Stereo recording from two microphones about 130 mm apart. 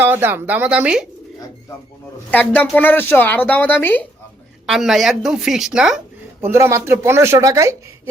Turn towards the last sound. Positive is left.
turn(degrees=-25)  # may be behind; listen again after turning